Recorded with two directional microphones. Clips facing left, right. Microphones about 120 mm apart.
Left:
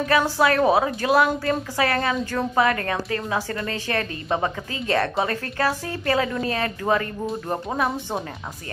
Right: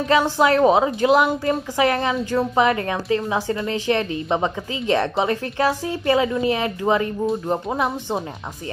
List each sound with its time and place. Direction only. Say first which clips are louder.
0.1 s a woman's voice: right 3 dB; 20° right (ahead or behind)